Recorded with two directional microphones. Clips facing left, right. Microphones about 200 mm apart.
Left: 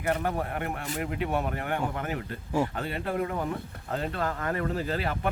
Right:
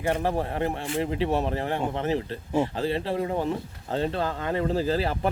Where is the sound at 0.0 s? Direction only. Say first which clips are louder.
Right 3 dB; 30° right (ahead or behind).